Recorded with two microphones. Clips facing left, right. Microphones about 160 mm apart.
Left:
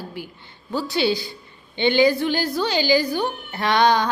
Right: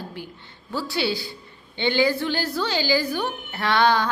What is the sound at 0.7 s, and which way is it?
A woman's voice, 20° left (ahead or behind).